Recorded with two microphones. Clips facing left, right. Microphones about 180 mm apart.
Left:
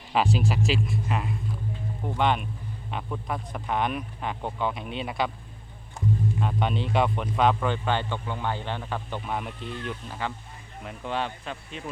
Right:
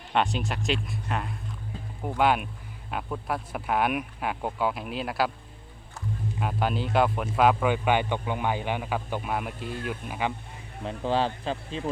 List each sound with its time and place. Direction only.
0.1 s a man's voice: centre (ahead or behind)
6.4 s a man's voice: 5° right (ahead or behind)
10.8 s speech: 30° right (ahead or behind)